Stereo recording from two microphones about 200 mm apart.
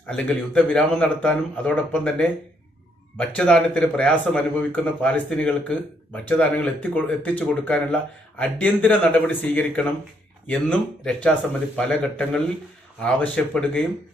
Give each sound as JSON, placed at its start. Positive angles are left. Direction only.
{"t": 0.1, "sound": "a man's voice", "side_deg": 5}